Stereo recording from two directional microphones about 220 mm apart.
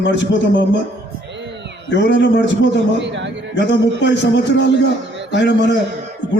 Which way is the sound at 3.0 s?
55° right (ahead or behind).